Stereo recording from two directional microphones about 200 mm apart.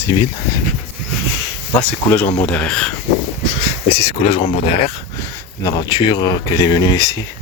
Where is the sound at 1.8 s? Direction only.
5° left (ahead or behind).